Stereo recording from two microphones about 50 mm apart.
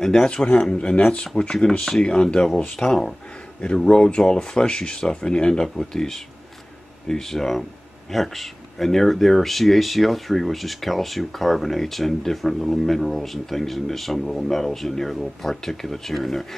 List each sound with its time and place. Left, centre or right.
0.0 s speech: centre
0.3 s speech: left; by 16.4 s centre